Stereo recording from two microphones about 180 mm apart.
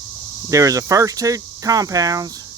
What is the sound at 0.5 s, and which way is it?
Speech, 20° right (ahead or behind).